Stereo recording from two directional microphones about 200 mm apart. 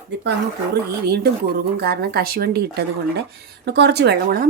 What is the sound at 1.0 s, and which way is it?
Speech, 55° right (ahead or behind).